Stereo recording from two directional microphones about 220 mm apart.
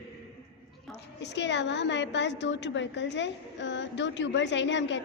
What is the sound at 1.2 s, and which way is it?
A woman's voice, 55° left (ahead or behind).